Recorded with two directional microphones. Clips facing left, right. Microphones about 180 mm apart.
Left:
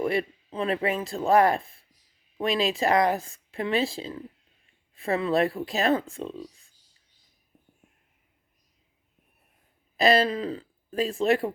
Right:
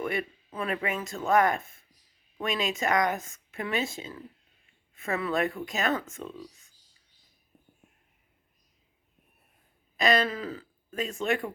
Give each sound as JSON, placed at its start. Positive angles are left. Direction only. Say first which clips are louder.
{"t": 0.0, "sound": "speech", "louder": "left 5 dB", "side_deg": 30}
{"t": 10.0, "sound": "speech", "louder": "left 4 dB", "side_deg": 35}